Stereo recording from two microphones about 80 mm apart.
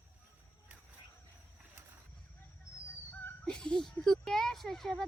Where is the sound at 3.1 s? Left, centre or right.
Centre.